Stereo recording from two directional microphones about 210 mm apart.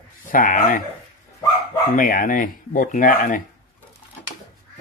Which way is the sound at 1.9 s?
40° left (ahead or behind).